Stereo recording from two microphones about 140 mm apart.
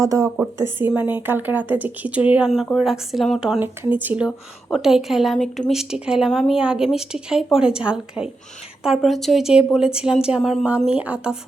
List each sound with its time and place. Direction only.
0.0 s speech: 25° right (ahead or behind); by 3.6 s centre (ahead or behind)
3.6 s speech: 15° right (ahead or behind)